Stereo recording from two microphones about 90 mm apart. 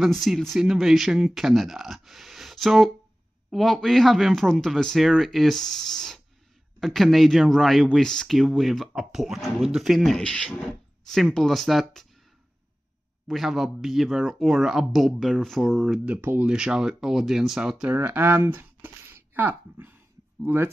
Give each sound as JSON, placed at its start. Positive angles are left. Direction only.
{"t": 0.0, "sound": "speech", "side_deg": 0}
{"t": 10.2, "sound": "speech", "side_deg": 10}
{"t": 13.3, "sound": "speech", "side_deg": 0}
{"t": 16.1, "sound": "speech", "side_deg": -20}
{"t": 16.4, "sound": "speech", "side_deg": -10}
{"t": 17.8, "sound": "speech", "side_deg": -25}